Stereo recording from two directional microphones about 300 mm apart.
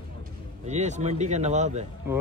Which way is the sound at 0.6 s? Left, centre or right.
Right.